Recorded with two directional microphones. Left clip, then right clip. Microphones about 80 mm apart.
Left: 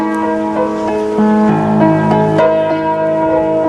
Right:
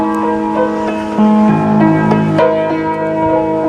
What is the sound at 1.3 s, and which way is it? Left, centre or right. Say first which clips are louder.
Music: even; centre.